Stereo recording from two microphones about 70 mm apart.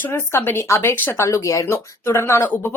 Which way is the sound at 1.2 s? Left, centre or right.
Left.